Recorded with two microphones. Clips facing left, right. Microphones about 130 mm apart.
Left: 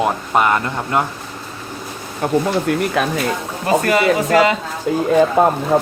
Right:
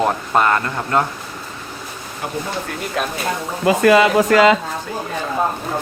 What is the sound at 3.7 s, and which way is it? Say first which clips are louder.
Speech: right 2 dB; 90° right.